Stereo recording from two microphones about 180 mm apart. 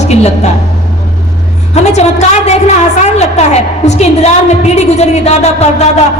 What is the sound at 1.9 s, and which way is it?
A woman's voice, 40° left (ahead or behind).